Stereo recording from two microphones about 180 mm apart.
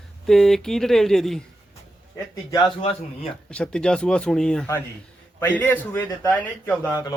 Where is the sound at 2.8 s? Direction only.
35° left (ahead or behind).